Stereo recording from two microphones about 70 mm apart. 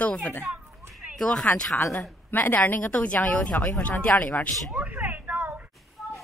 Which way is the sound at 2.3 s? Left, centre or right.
Left.